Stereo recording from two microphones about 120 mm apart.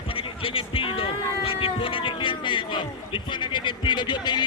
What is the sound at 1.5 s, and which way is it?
Speech, 50° left (ahead or behind).